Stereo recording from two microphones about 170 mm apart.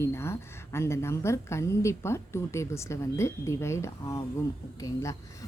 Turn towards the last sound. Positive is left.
turn(degrees=20)  # may be behind; listen again after turning